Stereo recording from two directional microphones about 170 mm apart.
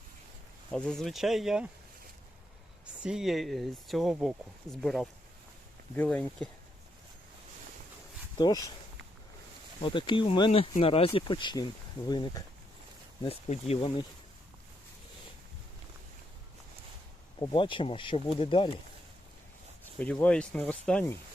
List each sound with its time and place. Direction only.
0.7 s speech: 5° left (ahead or behind)
3.0 s speech: 5° right (ahead or behind)
8.4 s speech: 20° left (ahead or behind)
9.8 s speech: 30° left (ahead or behind)
13.2 s speech: 35° left (ahead or behind)
17.4 s speech: 30° left (ahead or behind)
19.8 s speech: 10° left (ahead or behind)